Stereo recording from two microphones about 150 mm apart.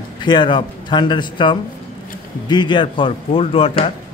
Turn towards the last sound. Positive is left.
turn(degrees=40)  # may be behind; listen again after turning